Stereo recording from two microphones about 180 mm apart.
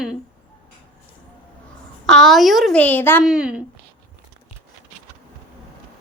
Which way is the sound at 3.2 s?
5° right (ahead or behind).